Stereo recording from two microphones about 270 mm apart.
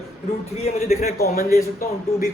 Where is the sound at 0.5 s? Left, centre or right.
Left.